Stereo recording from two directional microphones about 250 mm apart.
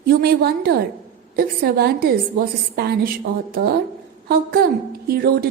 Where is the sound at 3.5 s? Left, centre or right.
Right.